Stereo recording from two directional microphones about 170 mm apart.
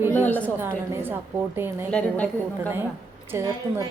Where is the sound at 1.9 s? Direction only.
5° left (ahead or behind).